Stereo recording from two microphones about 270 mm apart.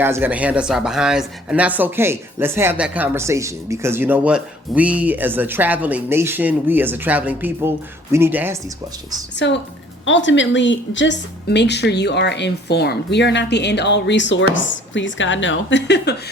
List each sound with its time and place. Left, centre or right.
0.0 s speech: centre
9.4 s a woman's voice: left